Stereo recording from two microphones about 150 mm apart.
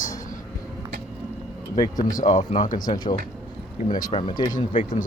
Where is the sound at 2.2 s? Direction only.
55° left (ahead or behind).